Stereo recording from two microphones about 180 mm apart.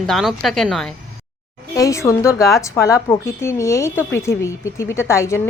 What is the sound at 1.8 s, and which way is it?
A woman's voice, 15° left (ahead or behind).